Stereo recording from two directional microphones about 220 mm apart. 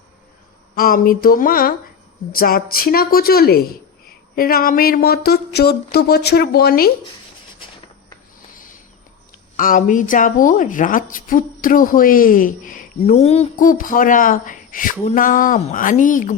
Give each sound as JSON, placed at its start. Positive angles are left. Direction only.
{"t": 0.8, "sound": "a woman's voice", "side_deg": 40}
{"t": 2.3, "sound": "a sound", "side_deg": 40}
{"t": 9.6, "sound": "a woman's voice", "side_deg": 40}